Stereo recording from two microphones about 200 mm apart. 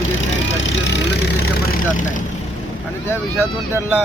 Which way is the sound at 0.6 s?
65° left (ahead or behind).